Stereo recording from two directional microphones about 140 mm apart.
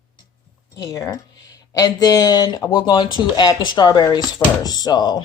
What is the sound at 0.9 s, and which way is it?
Speech, 20° left (ahead or behind).